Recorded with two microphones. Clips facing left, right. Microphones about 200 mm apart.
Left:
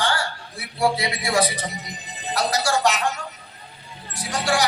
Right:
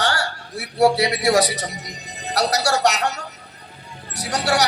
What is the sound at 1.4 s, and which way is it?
A man's voice, 80° right.